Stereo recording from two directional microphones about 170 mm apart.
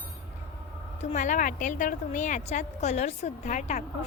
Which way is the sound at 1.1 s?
45° left (ahead or behind).